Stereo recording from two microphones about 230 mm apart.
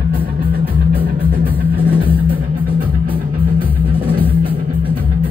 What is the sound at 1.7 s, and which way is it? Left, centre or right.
Music, centre.